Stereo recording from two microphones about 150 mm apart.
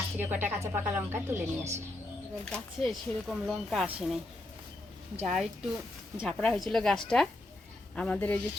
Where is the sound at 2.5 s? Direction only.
Centre (ahead or behind).